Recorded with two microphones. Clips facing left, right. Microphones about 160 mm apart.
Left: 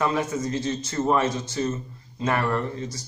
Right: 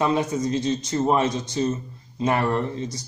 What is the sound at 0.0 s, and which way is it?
Speech, 20° right (ahead or behind).